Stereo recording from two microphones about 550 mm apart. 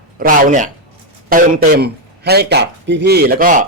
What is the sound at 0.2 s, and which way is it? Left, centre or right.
Speech, centre.